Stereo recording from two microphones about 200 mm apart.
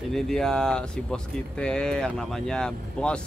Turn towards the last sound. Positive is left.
turn(degrees=5)  # may be behind; listen again after turning